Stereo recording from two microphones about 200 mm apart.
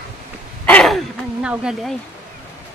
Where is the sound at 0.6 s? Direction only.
5° left (ahead or behind).